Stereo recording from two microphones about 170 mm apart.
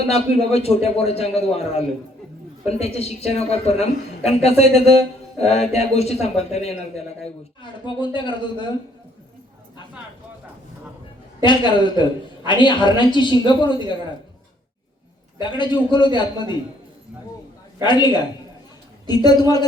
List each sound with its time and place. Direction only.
0.1 s a woman's voice: 35° left (ahead or behind)
7.9 s a woman's voice: 30° left (ahead or behind)
11.4 s a woman's voice: 25° left (ahead or behind)
15.4 s a woman's voice: 25° left (ahead or behind)
17.8 s a woman's voice: 25° left (ahead or behind)